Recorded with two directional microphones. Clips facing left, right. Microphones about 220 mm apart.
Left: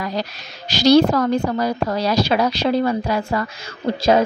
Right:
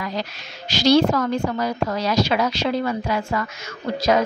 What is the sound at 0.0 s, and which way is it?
A woman's voice, 35° left (ahead or behind).